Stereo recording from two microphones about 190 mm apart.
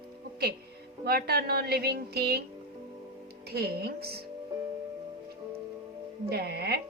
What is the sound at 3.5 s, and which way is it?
Speech, 55° right (ahead or behind).